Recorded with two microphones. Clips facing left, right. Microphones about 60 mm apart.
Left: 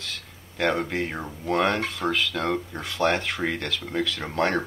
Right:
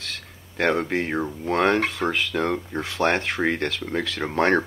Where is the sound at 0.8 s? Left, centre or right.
Centre.